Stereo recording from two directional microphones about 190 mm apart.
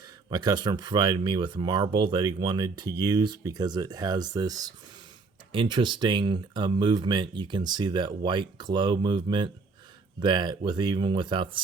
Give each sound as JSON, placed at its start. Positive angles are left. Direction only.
{"t": 0.3, "sound": "speech", "side_deg": -20}